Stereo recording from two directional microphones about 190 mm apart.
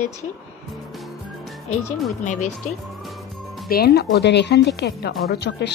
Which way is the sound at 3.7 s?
55° left (ahead or behind).